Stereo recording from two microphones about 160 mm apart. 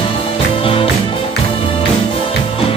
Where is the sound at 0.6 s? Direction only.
35° left (ahead or behind).